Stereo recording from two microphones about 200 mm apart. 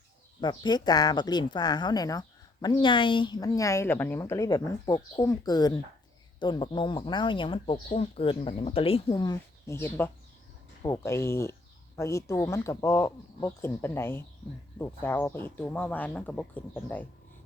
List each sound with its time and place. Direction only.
0.4 s speech: 20° left (ahead or behind)